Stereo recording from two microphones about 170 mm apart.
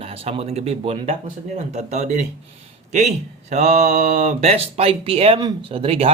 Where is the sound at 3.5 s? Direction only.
40° right (ahead or behind).